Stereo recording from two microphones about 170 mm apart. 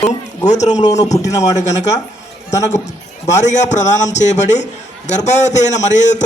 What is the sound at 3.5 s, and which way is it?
A man's voice, 45° left (ahead or behind).